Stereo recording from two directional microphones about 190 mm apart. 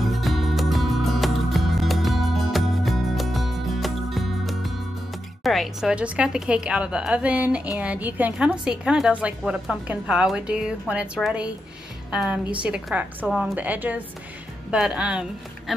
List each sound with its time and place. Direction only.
0.0 s music: centre (ahead or behind)
5.4 s a woman's voice: centre (ahead or behind)